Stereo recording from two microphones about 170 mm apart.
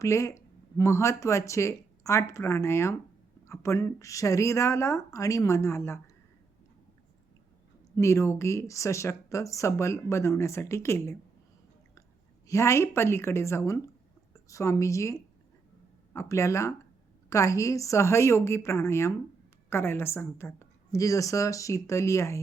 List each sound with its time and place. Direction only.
0.0 s speech: 20° left (ahead or behind)
7.9 s speech: 15° left (ahead or behind)
12.5 s speech: 15° left (ahead or behind)